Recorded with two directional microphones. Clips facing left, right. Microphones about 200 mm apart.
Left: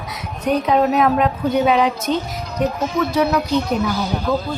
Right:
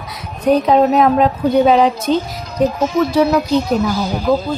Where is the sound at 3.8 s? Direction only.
60° left (ahead or behind).